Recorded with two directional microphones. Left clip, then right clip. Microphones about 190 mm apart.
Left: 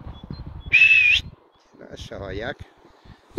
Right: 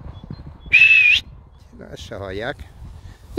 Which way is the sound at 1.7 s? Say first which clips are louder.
Right 3 dB; 25° right (ahead or behind).